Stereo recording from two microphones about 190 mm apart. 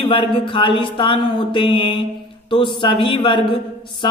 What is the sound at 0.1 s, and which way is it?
Mantra, 25° left (ahead or behind).